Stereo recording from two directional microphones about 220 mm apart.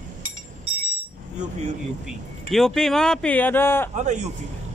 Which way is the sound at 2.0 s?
Centre (ahead or behind).